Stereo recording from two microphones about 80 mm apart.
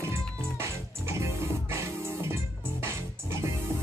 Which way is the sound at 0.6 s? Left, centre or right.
Right.